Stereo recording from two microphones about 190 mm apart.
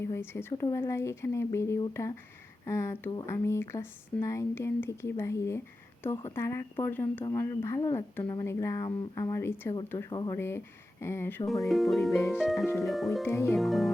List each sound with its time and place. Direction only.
0.0 s speech: 15° left (ahead or behind)
11.6 s speech: centre (ahead or behind)
13.2 s speech: 15° left (ahead or behind)
13.6 s speech: centre (ahead or behind)